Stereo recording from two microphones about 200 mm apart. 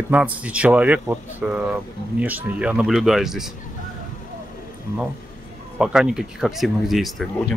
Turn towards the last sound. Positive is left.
turn(degrees=0)  # may be behind; listen again after turning